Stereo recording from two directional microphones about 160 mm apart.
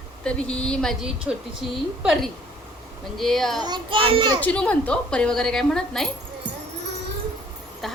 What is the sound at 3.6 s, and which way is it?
Child singing, 30° right (ahead or behind).